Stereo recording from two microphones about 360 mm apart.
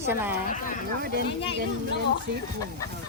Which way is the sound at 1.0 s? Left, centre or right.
Right.